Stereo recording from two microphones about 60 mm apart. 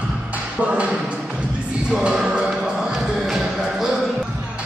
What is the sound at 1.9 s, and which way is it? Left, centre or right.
Music, centre.